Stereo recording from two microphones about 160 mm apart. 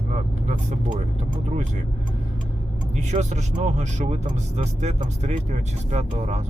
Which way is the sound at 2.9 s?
45° right (ahead or behind).